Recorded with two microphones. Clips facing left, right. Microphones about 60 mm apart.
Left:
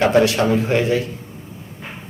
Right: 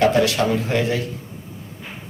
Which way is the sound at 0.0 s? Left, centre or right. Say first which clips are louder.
Left 2 dB; left.